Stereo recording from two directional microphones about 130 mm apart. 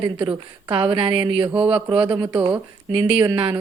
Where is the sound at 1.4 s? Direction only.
10° right (ahead or behind).